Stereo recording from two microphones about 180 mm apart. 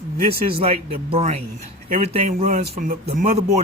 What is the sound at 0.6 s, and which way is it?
Speech, 35° right (ahead or behind).